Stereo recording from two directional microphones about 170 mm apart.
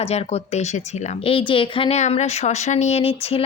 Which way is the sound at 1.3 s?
30° left (ahead or behind).